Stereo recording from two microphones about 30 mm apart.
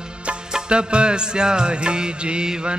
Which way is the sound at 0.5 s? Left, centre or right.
Right.